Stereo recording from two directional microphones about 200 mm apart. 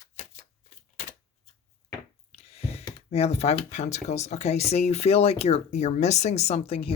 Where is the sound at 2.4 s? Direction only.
30° left (ahead or behind).